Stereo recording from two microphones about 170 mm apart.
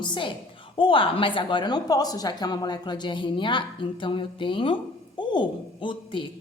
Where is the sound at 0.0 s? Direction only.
30° left (ahead or behind).